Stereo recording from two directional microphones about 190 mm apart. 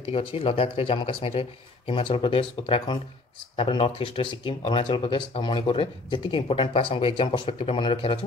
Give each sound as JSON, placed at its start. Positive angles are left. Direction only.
{"t": 0.1, "sound": "speech", "side_deg": 30}